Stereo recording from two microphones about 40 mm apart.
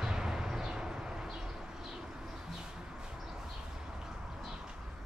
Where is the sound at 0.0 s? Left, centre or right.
Centre.